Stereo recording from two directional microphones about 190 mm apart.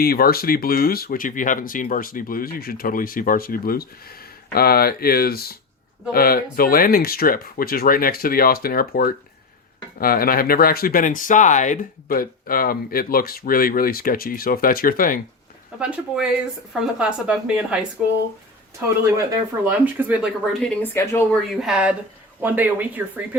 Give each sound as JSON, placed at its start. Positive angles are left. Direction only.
{"t": 0.0, "sound": "speech", "side_deg": 50}
{"t": 15.8, "sound": "speech", "side_deg": -5}
{"t": 19.6, "sound": "speech", "side_deg": -10}
{"t": 20.9, "sound": "speech", "side_deg": 15}
{"t": 21.5, "sound": "speech", "side_deg": 0}